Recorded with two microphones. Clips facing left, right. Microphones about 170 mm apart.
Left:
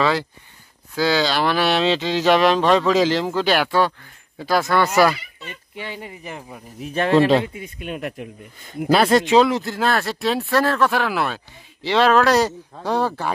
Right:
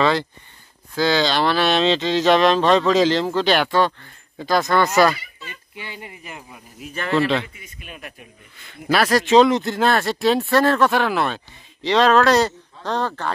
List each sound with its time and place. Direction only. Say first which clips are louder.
0.0 s speech: right 1 dB; 10° left (ahead or behind)
6.0 s speech: left 4 dB; 35° left (ahead or behind)
7.5 s speech: left 11 dB; 65° left (ahead or behind)
8.9 s speech: left 2 dB; 25° left (ahead or behind)
9.3 s speech: right 2 dB; 5° left (ahead or behind)